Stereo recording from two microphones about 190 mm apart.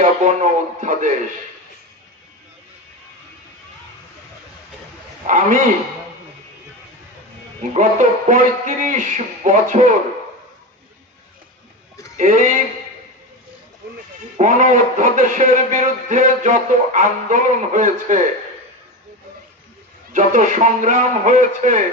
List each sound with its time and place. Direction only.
0.0 s a man's voice: 40° right (ahead or behind)
5.2 s speech: 40° right (ahead or behind)
7.7 s speech: 40° right (ahead or behind)
12.1 s speech: 40° right (ahead or behind)
14.3 s a man's voice: 40° right (ahead or behind)
20.1 s speech: 40° right (ahead or behind)